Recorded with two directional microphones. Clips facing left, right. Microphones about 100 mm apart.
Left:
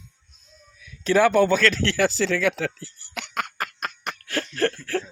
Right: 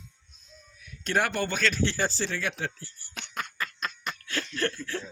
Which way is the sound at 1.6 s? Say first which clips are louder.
Left 6 dB; 90° left.